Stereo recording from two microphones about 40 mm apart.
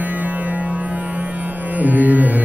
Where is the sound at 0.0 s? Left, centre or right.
Right.